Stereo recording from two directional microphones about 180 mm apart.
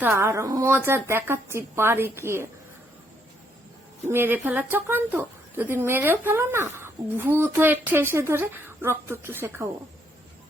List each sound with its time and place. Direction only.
0.0 s a woman's voice: 15° right (ahead or behind)
4.1 s a woman's voice: 10° right (ahead or behind)